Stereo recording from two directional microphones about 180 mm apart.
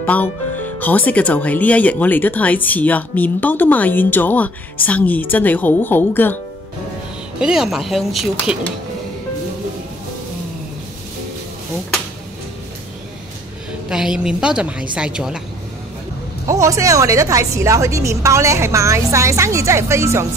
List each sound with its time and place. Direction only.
0.0 s speech: 10° left (ahead or behind)
7.3 s a woman's voice: 5° right (ahead or behind)
13.8 s a woman's voice: 5° right (ahead or behind)
16.4 s speech: 15° right (ahead or behind)